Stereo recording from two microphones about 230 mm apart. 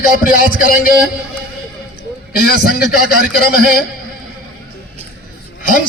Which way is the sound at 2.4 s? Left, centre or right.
Left.